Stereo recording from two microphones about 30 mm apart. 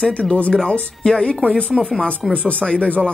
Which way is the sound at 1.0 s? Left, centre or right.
Left.